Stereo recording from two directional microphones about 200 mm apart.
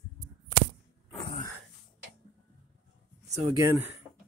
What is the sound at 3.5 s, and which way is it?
Speech, 15° right (ahead or behind).